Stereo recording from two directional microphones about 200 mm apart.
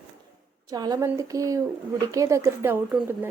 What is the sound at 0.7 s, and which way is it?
A woman's voice, 20° right (ahead or behind).